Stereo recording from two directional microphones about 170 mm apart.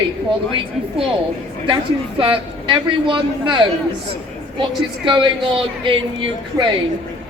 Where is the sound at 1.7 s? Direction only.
30° right (ahead or behind).